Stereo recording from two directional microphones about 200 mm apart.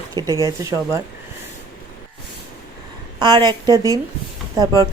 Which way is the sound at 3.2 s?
20° right (ahead or behind).